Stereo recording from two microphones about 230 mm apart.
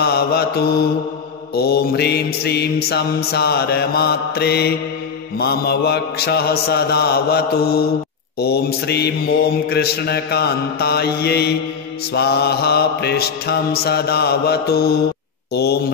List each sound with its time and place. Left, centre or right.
0.0 s mantra: left